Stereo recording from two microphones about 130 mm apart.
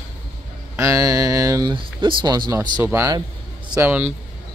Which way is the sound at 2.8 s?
20° right (ahead or behind).